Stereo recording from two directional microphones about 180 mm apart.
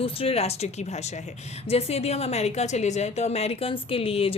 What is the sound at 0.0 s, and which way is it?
Speech, 30° left (ahead or behind).